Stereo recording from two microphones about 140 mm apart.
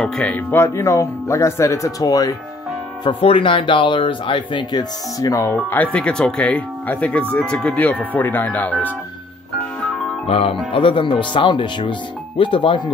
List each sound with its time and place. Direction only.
0.0 s speech: 10° left (ahead or behind); by 2.3 s 25° left (ahead or behind)
3.0 s speech: 40° left (ahead or behind); by 8.9 s 10° left (ahead or behind)
10.2 s speech: 45° left (ahead or behind)